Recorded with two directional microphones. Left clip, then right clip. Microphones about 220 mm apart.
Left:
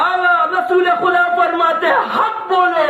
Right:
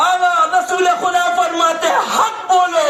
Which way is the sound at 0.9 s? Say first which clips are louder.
Left 1 dB; 50° right (ahead or behind).